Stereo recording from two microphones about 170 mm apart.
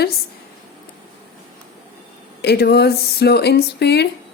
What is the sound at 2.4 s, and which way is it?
Speech, 70° left (ahead or behind).